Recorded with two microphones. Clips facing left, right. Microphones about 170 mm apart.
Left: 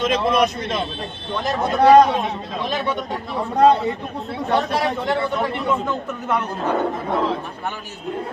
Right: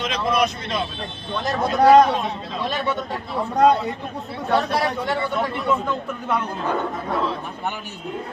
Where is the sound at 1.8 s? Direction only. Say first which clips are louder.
Left 1 dB; 20° left (ahead or behind).